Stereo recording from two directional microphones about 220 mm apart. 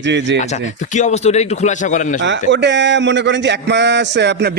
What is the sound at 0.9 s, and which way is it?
A man's voice, 30° left (ahead or behind).